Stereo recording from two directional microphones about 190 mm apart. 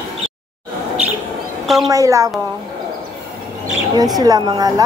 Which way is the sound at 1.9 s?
15° right (ahead or behind).